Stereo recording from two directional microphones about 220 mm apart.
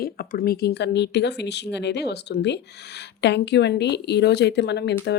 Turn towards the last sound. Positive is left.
turn(degrees=50)  # may be behind; listen again after turning